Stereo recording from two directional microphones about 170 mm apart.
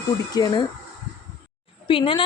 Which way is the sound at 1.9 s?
30° left (ahead or behind).